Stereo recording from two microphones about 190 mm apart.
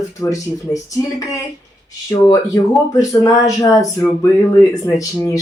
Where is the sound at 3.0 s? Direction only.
15° left (ahead or behind).